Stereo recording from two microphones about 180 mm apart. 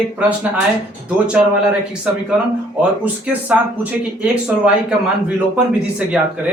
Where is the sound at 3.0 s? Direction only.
10° right (ahead or behind).